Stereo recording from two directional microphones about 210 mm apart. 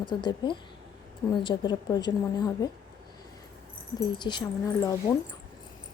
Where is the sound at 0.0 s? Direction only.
20° left (ahead or behind).